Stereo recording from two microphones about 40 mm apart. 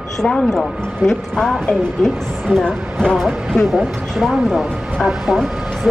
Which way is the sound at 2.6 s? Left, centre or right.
Left.